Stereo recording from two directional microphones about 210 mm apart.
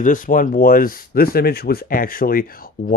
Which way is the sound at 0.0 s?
40° left (ahead or behind).